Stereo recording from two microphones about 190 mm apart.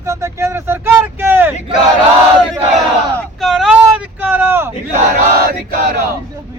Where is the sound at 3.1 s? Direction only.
Centre (ahead or behind).